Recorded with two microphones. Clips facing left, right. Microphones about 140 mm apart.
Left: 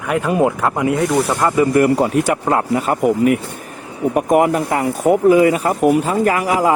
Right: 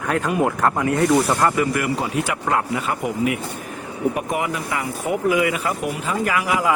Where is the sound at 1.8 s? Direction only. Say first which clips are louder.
Left 9 dB; 45° left (ahead or behind).